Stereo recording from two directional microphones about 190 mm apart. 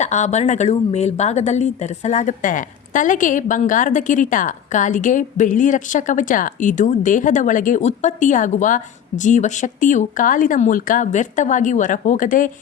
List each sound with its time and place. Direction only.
0.0 s a woman's voice: 35° left (ahead or behind)